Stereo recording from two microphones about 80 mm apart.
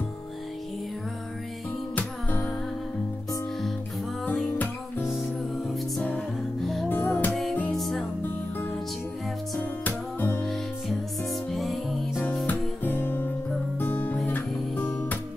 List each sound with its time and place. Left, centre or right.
2.0 s music: centre
4.3 s music: centre
5.0 s music: centre
6.9 s music: left
7.7 s music: centre
9.6 s music: left
10.4 s music: centre
12.4 s guitar: left
13.7 s music: left